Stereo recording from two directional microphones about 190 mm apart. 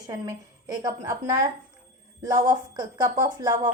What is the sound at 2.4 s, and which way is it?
A woman's voice, 20° right (ahead or behind).